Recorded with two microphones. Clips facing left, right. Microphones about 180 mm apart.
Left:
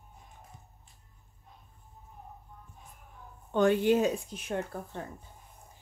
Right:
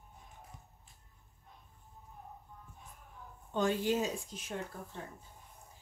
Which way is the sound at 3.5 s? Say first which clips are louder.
Left 7 dB; 60° left (ahead or behind).